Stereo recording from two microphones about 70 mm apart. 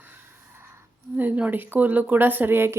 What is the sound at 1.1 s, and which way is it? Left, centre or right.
A woman's voice, right.